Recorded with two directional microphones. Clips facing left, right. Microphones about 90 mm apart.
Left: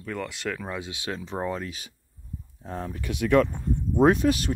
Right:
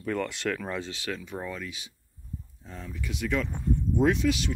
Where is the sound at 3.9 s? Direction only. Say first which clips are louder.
Left 5 dB; 45° left (ahead or behind).